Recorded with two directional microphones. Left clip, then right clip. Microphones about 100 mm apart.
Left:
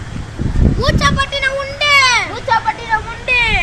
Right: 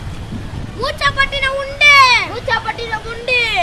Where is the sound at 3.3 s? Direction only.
35° right (ahead or behind).